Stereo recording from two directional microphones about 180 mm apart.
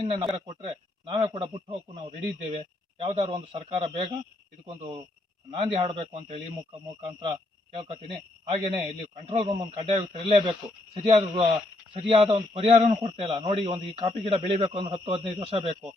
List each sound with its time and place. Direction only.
0.3 s a man's voice: 30° right (ahead or behind)
5.5 s a man's voice: 30° right (ahead or behind)